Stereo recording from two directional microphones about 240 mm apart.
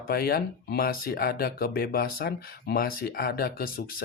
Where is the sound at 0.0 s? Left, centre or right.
Left.